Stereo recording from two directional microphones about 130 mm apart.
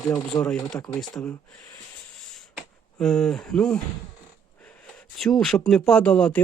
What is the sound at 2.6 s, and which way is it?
Speech, 5° left (ahead or behind).